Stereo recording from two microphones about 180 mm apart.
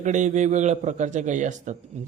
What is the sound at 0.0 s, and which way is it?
A man's voice, 40° right (ahead or behind).